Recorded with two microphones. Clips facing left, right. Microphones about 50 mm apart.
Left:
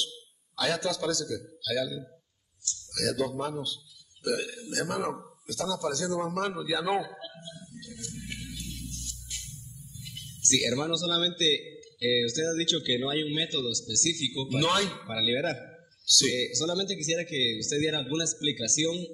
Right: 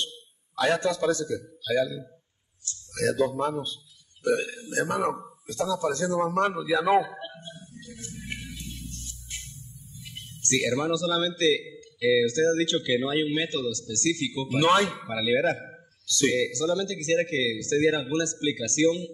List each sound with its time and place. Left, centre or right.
0.0 s a man's voice: right